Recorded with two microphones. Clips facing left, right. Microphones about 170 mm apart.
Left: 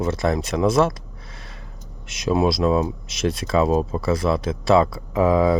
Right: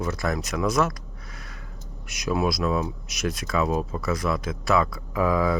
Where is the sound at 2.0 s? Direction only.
25° left (ahead or behind).